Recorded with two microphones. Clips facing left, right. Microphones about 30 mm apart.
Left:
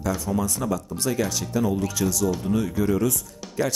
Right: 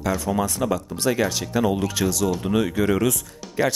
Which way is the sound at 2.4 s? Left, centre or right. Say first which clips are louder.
Right 3 dB; right.